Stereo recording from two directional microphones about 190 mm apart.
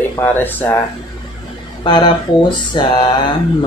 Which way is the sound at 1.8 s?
25° left (ahead or behind).